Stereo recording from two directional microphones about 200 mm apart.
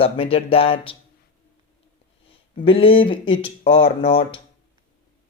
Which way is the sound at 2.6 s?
25° left (ahead or behind).